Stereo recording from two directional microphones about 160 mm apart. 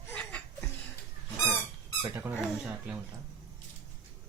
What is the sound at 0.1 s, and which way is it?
Chuckle, 10° left (ahead or behind).